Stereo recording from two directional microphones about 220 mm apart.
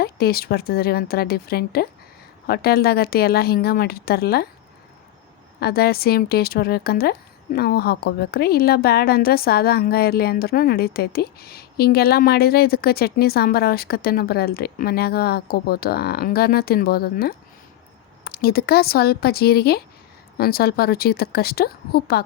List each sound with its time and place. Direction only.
0.0 s speech: 45° left (ahead or behind)
5.5 s speech: 45° left (ahead or behind)